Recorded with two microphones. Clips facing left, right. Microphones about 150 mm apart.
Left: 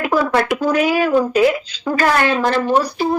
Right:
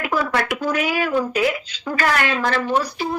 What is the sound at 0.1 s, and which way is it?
Speech, 35° left (ahead or behind).